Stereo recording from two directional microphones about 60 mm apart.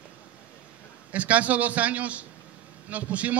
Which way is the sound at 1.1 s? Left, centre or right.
Right.